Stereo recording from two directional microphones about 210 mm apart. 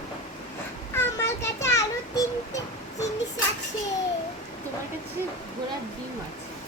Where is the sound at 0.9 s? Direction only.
15° left (ahead or behind).